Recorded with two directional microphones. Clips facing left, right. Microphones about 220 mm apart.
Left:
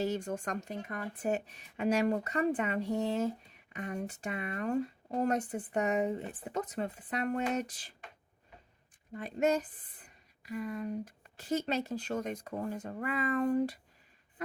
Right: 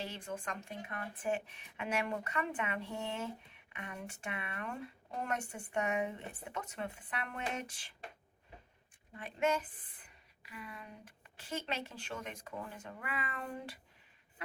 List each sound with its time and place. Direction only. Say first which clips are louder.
0.0 s speech: left 9 dB; 45° left (ahead or behind)
9.1 s speech: left 5 dB; 40° left (ahead or behind)